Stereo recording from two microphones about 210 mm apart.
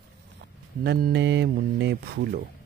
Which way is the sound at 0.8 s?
50° right (ahead or behind).